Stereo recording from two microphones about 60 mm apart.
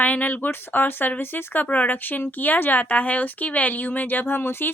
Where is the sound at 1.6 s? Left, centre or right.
Left.